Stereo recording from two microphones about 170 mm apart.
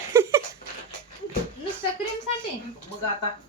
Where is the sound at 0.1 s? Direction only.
15° right (ahead or behind).